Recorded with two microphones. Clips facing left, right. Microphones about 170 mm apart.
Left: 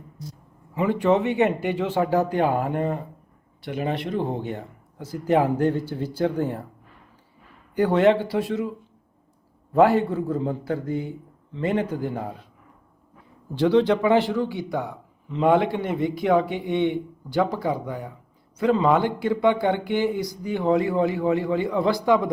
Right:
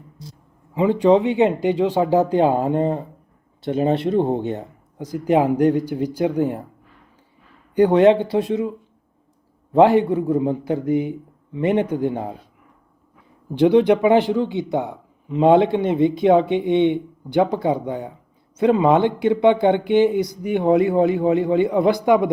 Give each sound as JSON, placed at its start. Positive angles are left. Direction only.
{"t": 0.3, "sound": "a man's voice", "side_deg": -20}
{"t": 7.8, "sound": "a man's voice", "side_deg": -20}
{"t": 9.7, "sound": "a man's voice", "side_deg": -20}
{"t": 13.5, "sound": "a man's voice", "side_deg": -20}